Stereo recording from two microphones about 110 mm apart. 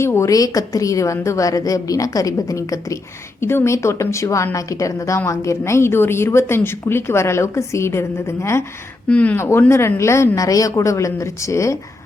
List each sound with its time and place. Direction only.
0.0 s a woman's voice: 25° left (ahead or behind)
9.0 s speech: 10° left (ahead or behind)
9.4 s a woman's voice: 25° left (ahead or behind)